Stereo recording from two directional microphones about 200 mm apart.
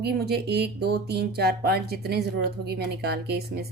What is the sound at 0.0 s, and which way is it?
A woman's voice, 55° right (ahead or behind).